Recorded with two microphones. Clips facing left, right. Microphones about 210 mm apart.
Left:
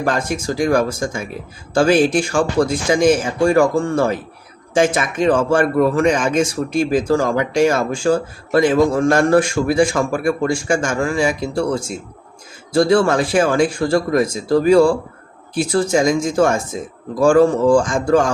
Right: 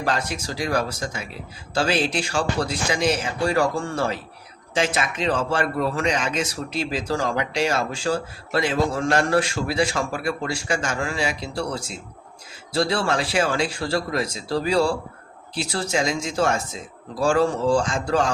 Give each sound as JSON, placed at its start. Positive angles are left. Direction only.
{"t": 0.0, "sound": "speech", "side_deg": 50}